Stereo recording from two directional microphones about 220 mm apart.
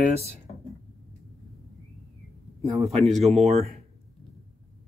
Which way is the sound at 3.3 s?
30° right (ahead or behind).